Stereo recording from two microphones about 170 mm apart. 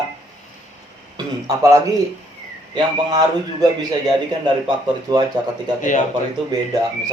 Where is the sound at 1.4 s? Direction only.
20° right (ahead or behind).